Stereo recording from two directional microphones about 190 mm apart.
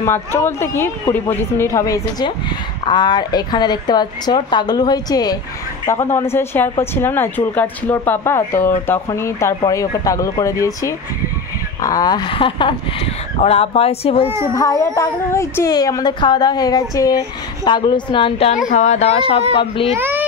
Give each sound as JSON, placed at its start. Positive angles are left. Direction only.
{"t": 0.0, "sound": "a child's voice", "side_deg": 15}
{"t": 14.5, "sound": "a child's voice", "side_deg": 20}
{"t": 18.7, "sound": "speech", "side_deg": 35}
{"t": 20.0, "sound": "a child's voice", "side_deg": -10}